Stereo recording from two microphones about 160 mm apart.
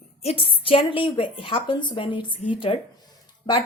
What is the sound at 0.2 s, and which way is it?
Speech, 35° left (ahead or behind).